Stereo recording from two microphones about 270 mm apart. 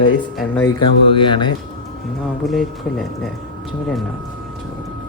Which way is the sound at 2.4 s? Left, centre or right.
Centre.